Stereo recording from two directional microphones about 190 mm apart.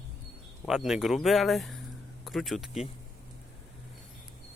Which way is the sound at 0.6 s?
Centre (ahead or behind).